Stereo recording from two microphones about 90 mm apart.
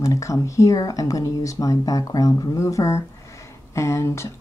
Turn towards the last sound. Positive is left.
turn(degrees=30)  # may be behind; listen again after turning